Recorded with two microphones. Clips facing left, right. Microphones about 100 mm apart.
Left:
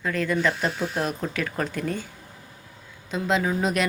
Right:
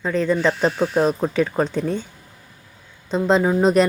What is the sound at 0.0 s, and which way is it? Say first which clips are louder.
Speech: right 5 dB; 25° right (ahead or behind).